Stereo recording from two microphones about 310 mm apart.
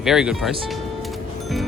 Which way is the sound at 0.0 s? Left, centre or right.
Centre.